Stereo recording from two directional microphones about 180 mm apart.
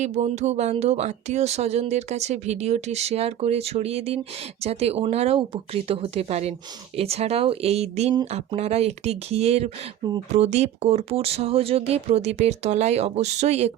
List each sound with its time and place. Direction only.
0.0 s speech: 40° right (ahead or behind)